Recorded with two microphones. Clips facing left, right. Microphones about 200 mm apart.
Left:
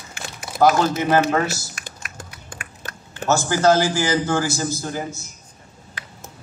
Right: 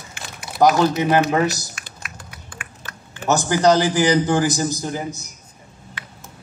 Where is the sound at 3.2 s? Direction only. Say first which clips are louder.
Right 1 dB; 15° right (ahead or behind).